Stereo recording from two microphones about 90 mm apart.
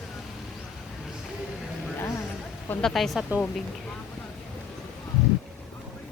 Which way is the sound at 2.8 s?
5° left (ahead or behind).